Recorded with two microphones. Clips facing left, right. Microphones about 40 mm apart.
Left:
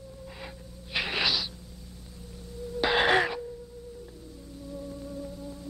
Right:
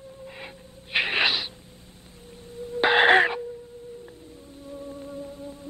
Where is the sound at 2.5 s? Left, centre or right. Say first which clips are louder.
Right 5 dB; right.